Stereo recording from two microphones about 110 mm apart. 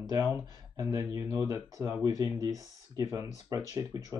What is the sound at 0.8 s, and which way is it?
Speech, 30° right (ahead or behind).